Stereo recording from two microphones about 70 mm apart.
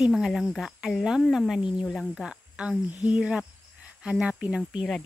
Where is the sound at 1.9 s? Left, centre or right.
Centre.